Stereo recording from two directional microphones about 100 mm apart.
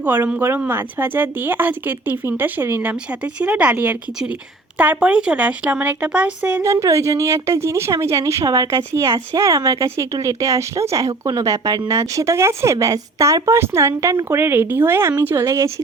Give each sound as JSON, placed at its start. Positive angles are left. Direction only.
{"t": 0.0, "sound": "speech", "side_deg": -20}
{"t": 6.6, "sound": "speech", "side_deg": -30}